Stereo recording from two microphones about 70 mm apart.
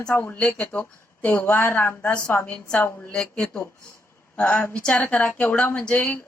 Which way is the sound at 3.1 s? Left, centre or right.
Centre.